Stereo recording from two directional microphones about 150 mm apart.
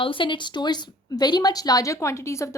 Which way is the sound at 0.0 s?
35° left (ahead or behind).